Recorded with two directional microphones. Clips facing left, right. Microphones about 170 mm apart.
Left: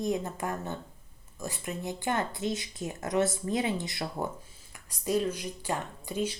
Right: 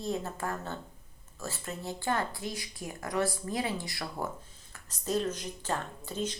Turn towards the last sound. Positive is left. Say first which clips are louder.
# left 3 dB
turn(degrees=10)  # may be behind; listen again after turning